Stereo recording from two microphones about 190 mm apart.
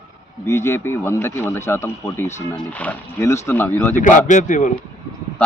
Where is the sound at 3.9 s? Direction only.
40° left (ahead or behind).